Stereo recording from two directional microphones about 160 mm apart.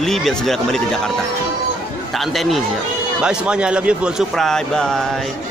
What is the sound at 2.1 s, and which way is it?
Speech, centre (ahead or behind).